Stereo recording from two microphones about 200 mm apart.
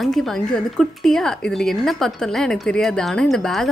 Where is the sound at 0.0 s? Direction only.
Centre (ahead or behind).